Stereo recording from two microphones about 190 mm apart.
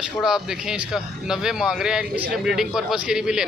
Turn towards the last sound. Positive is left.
turn(degrees=-5)  # may be behind; listen again after turning